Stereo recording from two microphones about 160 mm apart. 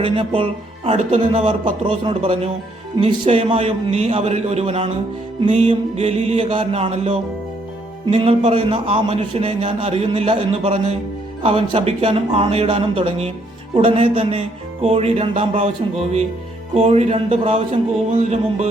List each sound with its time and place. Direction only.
0.0 s a man's voice: 35° right (ahead or behind)